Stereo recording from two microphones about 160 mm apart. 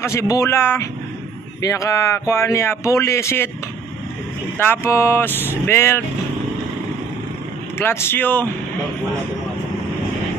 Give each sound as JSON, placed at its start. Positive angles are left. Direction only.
{"t": 0.0, "sound": "speech", "side_deg": 20}
{"t": 4.6, "sound": "speech", "side_deg": 15}
{"t": 7.8, "sound": "speech", "side_deg": 15}